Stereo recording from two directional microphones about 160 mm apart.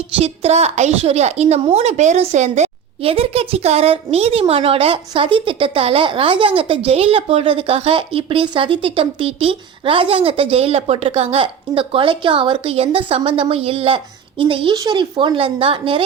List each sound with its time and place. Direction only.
0.2 s a woman's voice: 40° right (ahead or behind)